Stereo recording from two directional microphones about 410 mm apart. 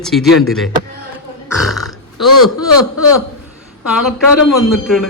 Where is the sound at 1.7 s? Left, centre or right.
Centre.